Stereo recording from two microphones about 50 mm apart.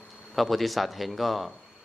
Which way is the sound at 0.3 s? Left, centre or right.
Centre.